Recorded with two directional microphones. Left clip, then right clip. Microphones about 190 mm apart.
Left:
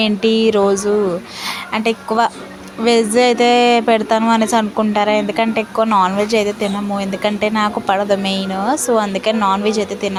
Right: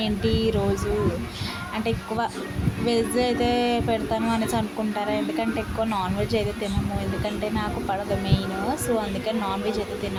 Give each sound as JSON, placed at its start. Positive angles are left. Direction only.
{"t": 0.0, "sound": "a woman's voice", "side_deg": 20}
{"t": 1.7, "sound": "a woman's voice", "side_deg": 20}